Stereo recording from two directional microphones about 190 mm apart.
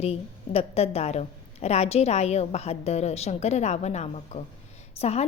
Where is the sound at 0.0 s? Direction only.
30° left (ahead or behind).